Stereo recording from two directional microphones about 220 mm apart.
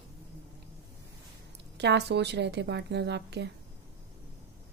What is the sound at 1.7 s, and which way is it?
A woman's voice, 50° right (ahead or behind).